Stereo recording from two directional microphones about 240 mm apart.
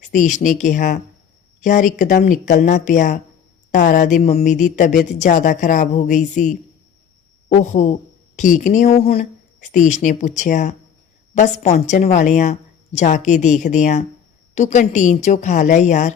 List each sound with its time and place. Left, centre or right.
0.0 s a woman's voice: left